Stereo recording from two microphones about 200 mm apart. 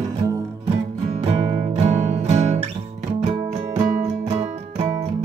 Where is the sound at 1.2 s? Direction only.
30° right (ahead or behind).